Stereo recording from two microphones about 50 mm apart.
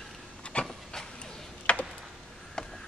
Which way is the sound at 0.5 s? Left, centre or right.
Left.